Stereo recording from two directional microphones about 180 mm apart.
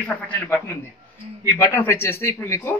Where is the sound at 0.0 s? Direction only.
10° left (ahead or behind).